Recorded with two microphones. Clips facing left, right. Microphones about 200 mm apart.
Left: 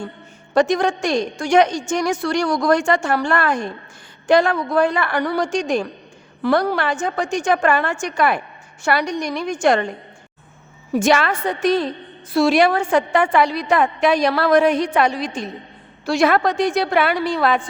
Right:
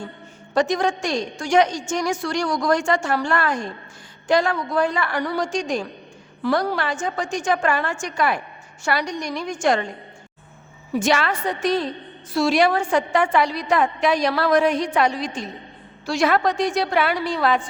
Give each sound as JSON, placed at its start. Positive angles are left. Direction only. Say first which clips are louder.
{"t": 0.5, "sound": "a woman's voice", "louder": "left 3 dB", "side_deg": 60}
{"t": 10.9, "sound": "a woman's voice", "louder": "left 4 dB", "side_deg": 50}